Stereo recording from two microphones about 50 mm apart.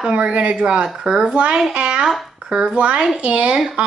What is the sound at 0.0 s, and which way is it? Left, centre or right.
A woman's voice, right.